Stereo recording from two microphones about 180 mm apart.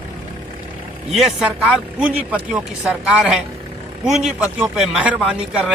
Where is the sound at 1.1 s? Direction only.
Centre (ahead or behind).